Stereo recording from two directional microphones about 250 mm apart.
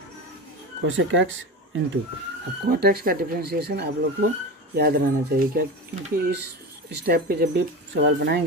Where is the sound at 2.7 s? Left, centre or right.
Right.